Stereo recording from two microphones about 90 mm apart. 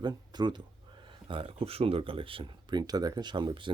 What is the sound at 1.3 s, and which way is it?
Speech, 80° right.